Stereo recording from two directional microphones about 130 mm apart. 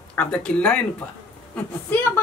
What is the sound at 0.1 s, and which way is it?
A woman's voice, 10° left (ahead or behind).